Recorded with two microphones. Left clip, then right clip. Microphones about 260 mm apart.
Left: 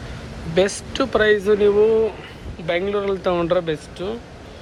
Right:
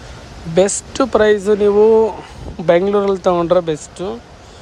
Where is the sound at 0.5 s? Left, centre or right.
Right.